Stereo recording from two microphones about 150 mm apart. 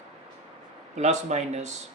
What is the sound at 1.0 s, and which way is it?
Speech, 50° right (ahead or behind).